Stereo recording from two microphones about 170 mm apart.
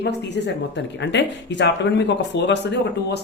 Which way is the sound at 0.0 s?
90° left.